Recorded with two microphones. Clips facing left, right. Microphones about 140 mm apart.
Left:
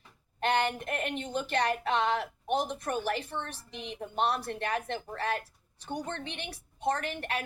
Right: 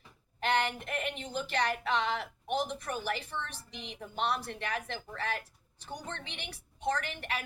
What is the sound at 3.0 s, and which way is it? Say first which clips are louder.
Speech: left 3 dB; 55° left (ahead or behind).